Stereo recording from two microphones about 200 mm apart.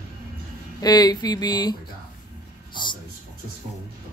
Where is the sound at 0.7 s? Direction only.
20° left (ahead or behind).